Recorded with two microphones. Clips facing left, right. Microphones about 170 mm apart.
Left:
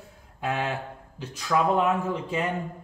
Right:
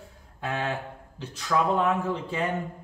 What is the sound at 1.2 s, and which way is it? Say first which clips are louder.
A man's voice: left 1 dB; 10° left (ahead or behind).